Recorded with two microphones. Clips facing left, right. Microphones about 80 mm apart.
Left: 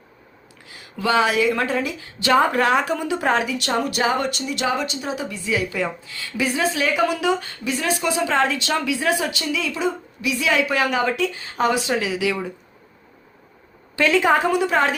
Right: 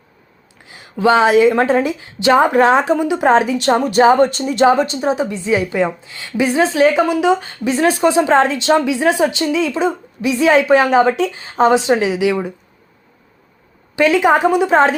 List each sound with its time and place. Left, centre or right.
0.7 s a woman's voice: right
13.9 s a woman's voice: centre